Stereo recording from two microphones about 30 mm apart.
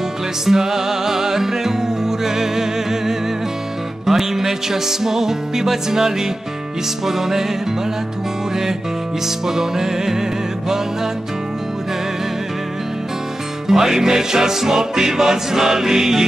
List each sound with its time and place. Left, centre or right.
0.5 s music: centre
9.5 s music: centre
13.7 s music: centre